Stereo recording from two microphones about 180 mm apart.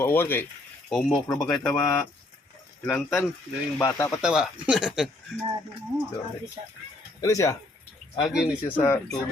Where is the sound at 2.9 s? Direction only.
Centre (ahead or behind).